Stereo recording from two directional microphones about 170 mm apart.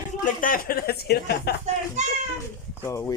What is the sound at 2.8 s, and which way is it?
Speech, 15° left (ahead or behind).